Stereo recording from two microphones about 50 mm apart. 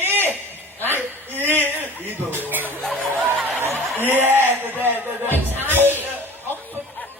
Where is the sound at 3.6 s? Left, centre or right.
Right.